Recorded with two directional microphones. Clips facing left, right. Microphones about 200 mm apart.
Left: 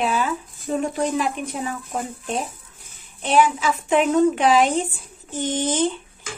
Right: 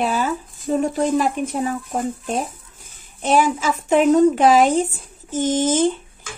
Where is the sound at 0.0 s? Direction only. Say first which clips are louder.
Right 2 dB; 40° right (ahead or behind).